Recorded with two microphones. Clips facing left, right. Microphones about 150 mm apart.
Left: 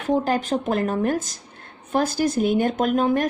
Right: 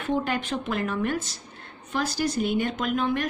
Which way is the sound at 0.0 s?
40° left (ahead or behind).